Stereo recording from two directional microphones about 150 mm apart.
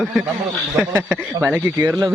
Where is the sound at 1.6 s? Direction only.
15° right (ahead or behind).